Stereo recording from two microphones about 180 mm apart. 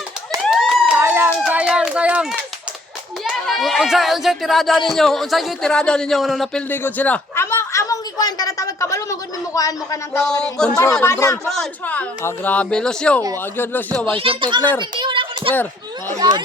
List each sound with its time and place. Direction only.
0.4 s a sound: centre (ahead or behind)
0.9 s run: 15° right (ahead or behind)
1.5 s a sound: 5° right (ahead or behind)
3.2 s a man's voice: centre (ahead or behind); by 10.2 s 15° left (ahead or behind)
10.6 s speech: 5° left (ahead or behind)
11.0 s a man's voice: 15° left (ahead or behind)
11.4 s a man's voice: centre (ahead or behind)
14.2 s speech: 30° right (ahead or behind)
14.8 s a sound: 25° right (ahead or behind)